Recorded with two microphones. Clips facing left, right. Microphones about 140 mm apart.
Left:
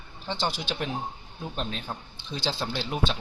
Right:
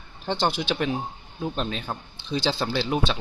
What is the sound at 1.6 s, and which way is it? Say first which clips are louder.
A man's voice: right 4 dB; 85° right.